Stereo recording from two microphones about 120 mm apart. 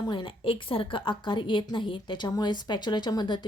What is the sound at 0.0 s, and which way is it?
A woman's voice, 40° left (ahead or behind).